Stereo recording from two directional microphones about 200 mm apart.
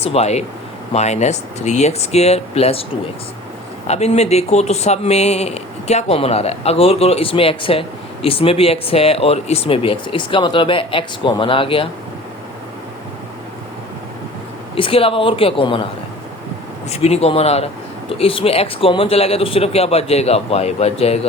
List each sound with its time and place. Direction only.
0.0 s speech: 30° left (ahead or behind)
3.8 s speech: 35° left (ahead or behind)
14.8 s speech: 25° left (ahead or behind)
16.9 s speech: 30° left (ahead or behind)